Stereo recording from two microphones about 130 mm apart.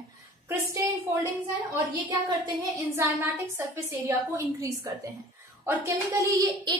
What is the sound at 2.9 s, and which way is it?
A woman's voice, 20° right (ahead or behind).